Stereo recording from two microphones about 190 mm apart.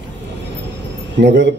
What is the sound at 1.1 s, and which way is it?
Speech, 65° right (ahead or behind).